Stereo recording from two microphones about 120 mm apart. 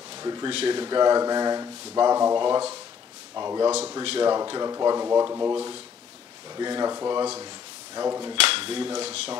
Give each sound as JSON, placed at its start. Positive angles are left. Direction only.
{"t": 0.1, "sound": "speech", "side_deg": -35}
{"t": 0.5, "sound": "speech", "side_deg": -50}
{"t": 4.0, "sound": "speech", "side_deg": -55}
{"t": 4.3, "sound": "speech", "side_deg": -35}
{"t": 6.5, "sound": "speech", "side_deg": -35}
{"t": 8.4, "sound": "speech", "side_deg": -50}